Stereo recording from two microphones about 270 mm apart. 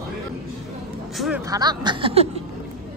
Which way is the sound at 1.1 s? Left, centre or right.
Centre.